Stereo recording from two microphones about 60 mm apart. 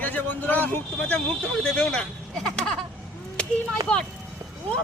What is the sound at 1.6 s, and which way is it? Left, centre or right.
Speech, centre.